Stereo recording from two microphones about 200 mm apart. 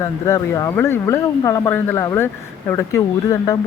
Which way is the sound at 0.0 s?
15° left (ahead or behind).